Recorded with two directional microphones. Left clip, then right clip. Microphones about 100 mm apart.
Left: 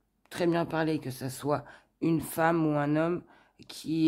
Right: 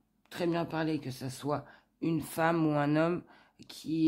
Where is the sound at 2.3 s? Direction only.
15° left (ahead or behind).